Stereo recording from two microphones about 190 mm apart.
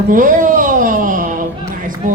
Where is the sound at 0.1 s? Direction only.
45° right (ahead or behind).